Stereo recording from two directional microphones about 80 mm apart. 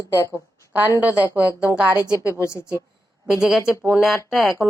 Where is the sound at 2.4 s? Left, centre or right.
Left.